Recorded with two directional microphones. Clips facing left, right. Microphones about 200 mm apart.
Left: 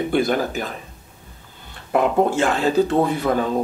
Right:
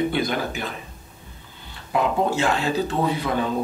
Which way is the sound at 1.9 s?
55° left (ahead or behind).